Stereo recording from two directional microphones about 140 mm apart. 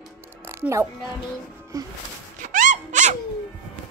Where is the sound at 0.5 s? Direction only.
20° right (ahead or behind).